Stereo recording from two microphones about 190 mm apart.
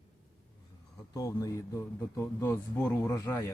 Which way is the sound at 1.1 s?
15° left (ahead or behind).